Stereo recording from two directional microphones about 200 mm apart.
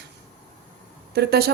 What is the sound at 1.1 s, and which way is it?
Speech, 55° right (ahead or behind).